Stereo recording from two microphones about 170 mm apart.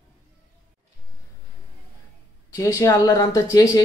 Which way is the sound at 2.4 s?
20° left (ahead or behind).